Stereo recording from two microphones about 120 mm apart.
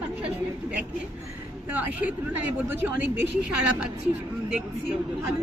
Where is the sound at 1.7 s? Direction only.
15° right (ahead or behind).